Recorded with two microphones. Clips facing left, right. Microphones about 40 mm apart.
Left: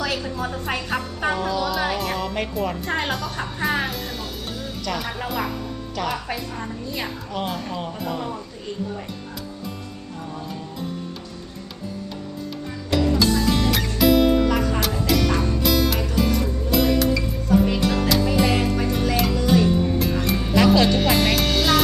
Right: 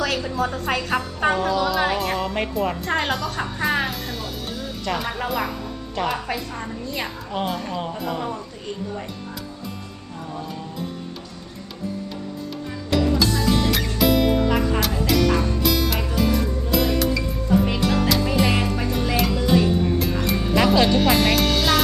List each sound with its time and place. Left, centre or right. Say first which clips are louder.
0.1 s a sound: right 1 dB; centre
0.8 s a woman's voice: right 3 dB; centre
1.2 s speech: right 3 dB; right
2.0 s a woman's voice: right 2 dB; centre
5.9 s a woman's voice: right 2 dB; centre
10.3 s a woman's voice: right 2 dB; centre
12.9 s music: left 1 dB; centre
14.4 s music: even; centre